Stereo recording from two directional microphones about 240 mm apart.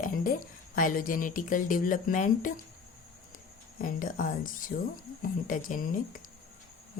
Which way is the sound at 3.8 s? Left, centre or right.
Left.